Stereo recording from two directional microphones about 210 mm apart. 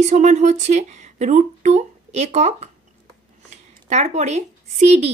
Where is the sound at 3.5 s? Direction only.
35° right (ahead or behind).